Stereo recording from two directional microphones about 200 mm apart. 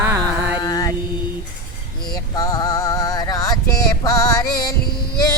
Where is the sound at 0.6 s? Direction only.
20° left (ahead or behind).